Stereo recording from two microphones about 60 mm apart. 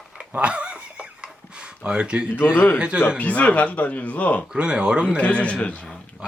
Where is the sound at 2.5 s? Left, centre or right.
Left.